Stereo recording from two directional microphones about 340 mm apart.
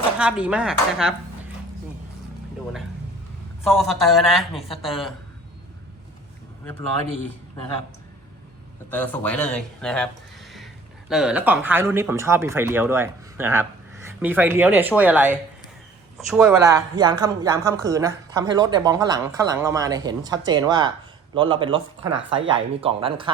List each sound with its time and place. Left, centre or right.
0.2 s speech: centre
3.6 s speech: centre
8.9 s speech: centre